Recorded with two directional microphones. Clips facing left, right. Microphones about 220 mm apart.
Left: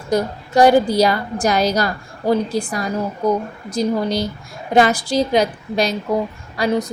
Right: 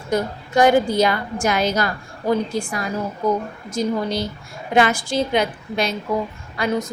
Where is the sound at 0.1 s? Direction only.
35° left (ahead or behind).